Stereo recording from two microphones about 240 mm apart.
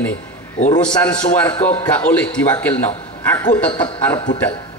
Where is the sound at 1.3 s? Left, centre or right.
Centre.